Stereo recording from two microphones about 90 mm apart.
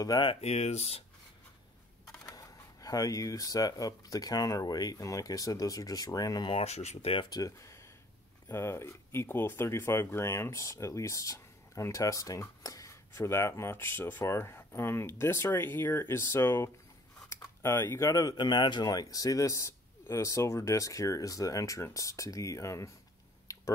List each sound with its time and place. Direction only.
0.1 s speech: 45° left (ahead or behind)
2.2 s speech: 40° left (ahead or behind)
18.3 s speech: 55° left (ahead or behind); by 22.8 s 35° left (ahead or behind)
23.4 s a sound: 35° left (ahead or behind)